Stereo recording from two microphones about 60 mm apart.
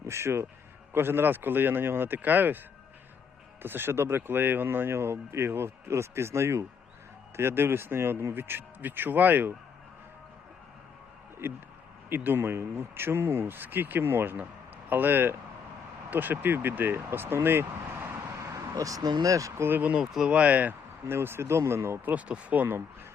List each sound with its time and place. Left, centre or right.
0.0 s speech: right
3.6 s speech: right
12.0 s speech: right
18.1 s vehicle: right
19.6 s speech: right
20.0 s speech: centre
20.3 s speech: right
21.1 s speech: right
22.0 s speech: right